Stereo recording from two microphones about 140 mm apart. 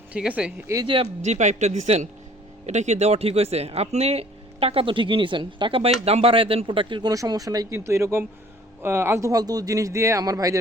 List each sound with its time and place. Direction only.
0.1 s speech: 10° right (ahead or behind)
1.2 s speech: 55° right (ahead or behind); by 10.6 s 25° right (ahead or behind)